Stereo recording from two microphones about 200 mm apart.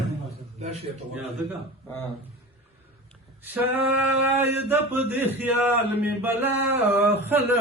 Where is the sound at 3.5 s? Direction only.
10° right (ahead or behind).